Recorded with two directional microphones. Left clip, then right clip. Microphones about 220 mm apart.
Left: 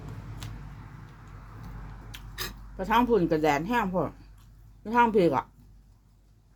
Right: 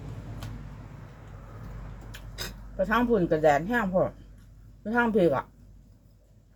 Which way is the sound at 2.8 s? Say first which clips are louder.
Left 1 dB; 15° left (ahead or behind).